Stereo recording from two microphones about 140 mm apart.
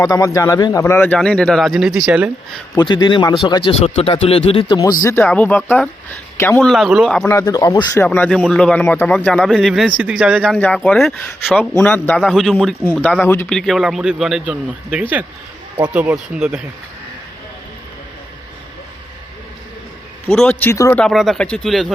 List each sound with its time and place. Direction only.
0.0 s speech: 25° left (ahead or behind); by 2.3 s 5° right (ahead or behind)
2.7 s a man's voice: 35° left (ahead or behind)
4.7 s speech: 30° left (ahead or behind)
5.0 s speech: 15° left (ahead or behind)
6.7 s speech: centre (ahead or behind)
7.4 s speech: 25° left (ahead or behind)
8.0 s speech: 10° left (ahead or behind); by 10.4 s 10° right (ahead or behind)
10.4 s speech: 5° left (ahead or behind)
11.8 s speech: 10° left (ahead or behind)
12.2 s speech: centre (ahead or behind)
13.0 s speech: 10° left (ahead or behind)
13.5 s speech: centre (ahead or behind)
20.3 s speech: 10° left (ahead or behind)
20.9 s speech: 5° left (ahead or behind)